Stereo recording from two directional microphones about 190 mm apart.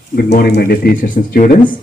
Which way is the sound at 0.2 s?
55° left (ahead or behind).